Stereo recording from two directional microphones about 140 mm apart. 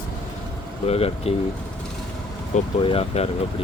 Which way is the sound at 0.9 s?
45° left (ahead or behind).